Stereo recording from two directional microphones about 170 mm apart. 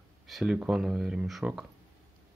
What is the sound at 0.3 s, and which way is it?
Speech, centre (ahead or behind).